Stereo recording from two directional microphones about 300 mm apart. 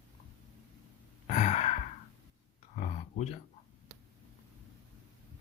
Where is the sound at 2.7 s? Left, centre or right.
Left.